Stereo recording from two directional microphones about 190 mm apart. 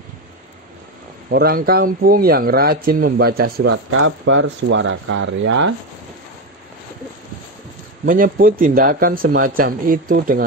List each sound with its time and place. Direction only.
1.3 s speech: 55° right (ahead or behind); by 5.7 s 75° right (ahead or behind)
8.0 s speech: 45° right (ahead or behind)